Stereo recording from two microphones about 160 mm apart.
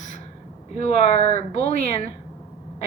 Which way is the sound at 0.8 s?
40° left (ahead or behind).